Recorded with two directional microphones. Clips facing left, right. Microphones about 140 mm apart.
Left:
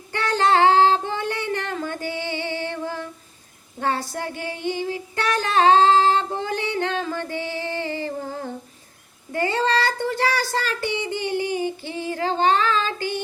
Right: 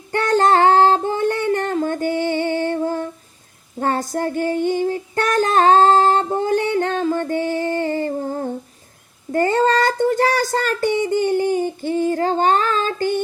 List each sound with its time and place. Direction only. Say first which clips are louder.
0.1 s singing: right 4 dB; 45° right (ahead or behind)
3.8 s female singing: right 5 dB; 45° right (ahead or behind)
9.3 s child singing: right 5 dB; 45° right (ahead or behind)